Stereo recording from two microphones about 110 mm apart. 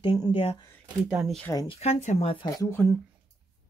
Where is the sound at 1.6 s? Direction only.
80° left; by 2.5 s 60° left (ahead or behind).